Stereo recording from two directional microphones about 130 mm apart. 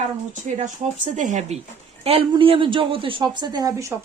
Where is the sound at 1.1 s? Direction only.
70° right (ahead or behind).